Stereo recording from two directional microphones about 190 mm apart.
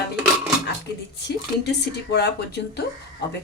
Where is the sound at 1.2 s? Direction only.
65° left (ahead or behind).